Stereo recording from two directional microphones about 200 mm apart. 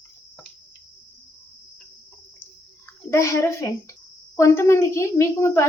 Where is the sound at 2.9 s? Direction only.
15° left (ahead or behind).